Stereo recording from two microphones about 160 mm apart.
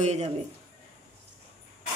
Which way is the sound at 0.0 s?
45° right (ahead or behind).